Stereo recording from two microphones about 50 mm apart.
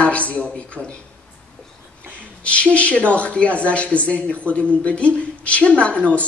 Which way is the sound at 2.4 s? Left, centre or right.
Left.